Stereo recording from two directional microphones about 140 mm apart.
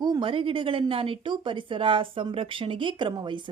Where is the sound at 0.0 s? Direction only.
35° right (ahead or behind).